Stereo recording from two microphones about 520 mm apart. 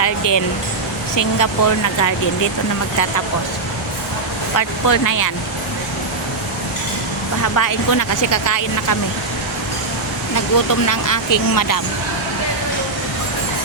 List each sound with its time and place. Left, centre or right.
0.0 s a sound: left
1.1 s speech: left
4.5 s speech: left
7.4 s speech: left
10.8 s speech: left